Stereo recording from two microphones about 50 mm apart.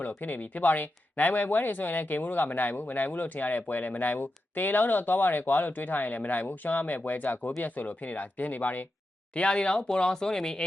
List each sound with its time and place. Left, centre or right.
0.2 s speech: left
9.3 s speech: left